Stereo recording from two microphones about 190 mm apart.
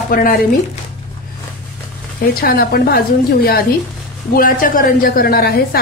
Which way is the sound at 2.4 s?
55° left (ahead or behind).